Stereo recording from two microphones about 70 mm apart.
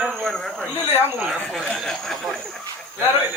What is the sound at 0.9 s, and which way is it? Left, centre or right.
Speech, right.